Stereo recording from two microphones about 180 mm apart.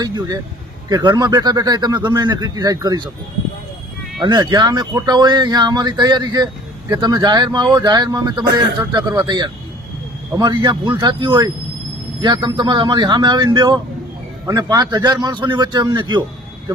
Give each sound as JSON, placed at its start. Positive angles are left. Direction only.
{"t": 0.0, "sound": "speech", "side_deg": -25}
{"t": 4.2, "sound": "speech", "side_deg": -25}